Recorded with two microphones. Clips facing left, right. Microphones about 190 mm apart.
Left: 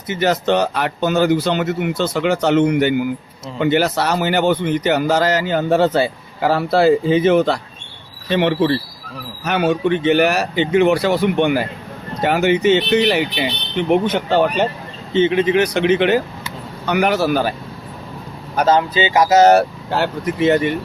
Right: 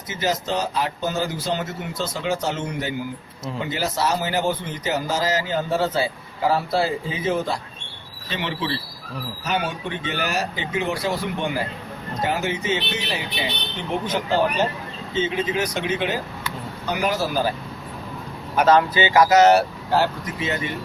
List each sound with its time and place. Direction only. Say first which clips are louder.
0.1 s speech: left 8 dB; 65° left (ahead or behind)
8.3 s speech: left 11 dB; 55° left (ahead or behind)
18.7 s speech: left 1 dB; 20° left (ahead or behind)
19.4 s speech: left 5 dB; 45° left (ahead or behind)
19.9 s speech: right 2 dB; 65° left (ahead or behind)